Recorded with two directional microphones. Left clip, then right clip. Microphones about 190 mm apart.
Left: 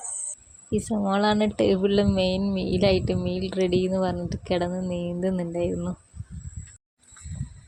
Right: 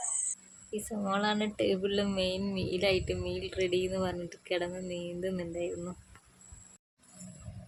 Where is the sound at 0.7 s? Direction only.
25° left (ahead or behind).